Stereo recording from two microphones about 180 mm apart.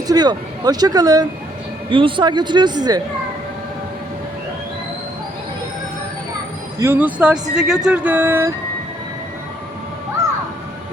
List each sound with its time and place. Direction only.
0.1 s speech: 20° right (ahead or behind)
6.7 s speech: 15° right (ahead or behind)